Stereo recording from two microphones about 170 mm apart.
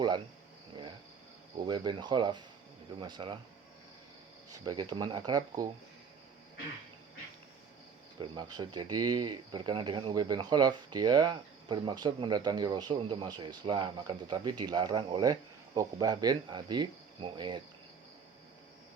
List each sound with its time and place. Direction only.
1.5 s speech: 25° right (ahead or behind)
4.6 s speech: 25° right (ahead or behind)
8.2 s speech: 25° right (ahead or behind)